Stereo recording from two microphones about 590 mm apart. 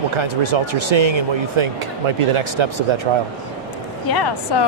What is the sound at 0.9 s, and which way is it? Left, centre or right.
Speech, right.